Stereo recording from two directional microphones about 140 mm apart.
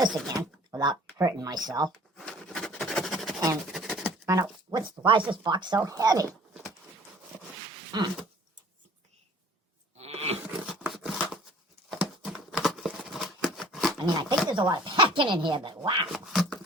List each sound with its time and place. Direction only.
0.3 s speech: 25° right (ahead or behind)
2.1 s a sound: 5° left (ahead or behind)
4.3 s speech: 25° right (ahead or behind)
5.0 s speech: 35° right (ahead or behind)
7.9 s speech: 30° right (ahead or behind)
10.0 s a sound: 50° right (ahead or behind)
10.7 s a sound: 5° right (ahead or behind)
14.0 s speech: 35° right (ahead or behind)
16.1 s speech: centre (ahead or behind)